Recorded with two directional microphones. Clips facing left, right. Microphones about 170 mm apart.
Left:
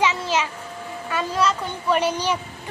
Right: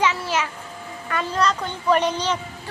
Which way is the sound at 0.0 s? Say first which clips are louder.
Left 1 dB; 20° left (ahead or behind).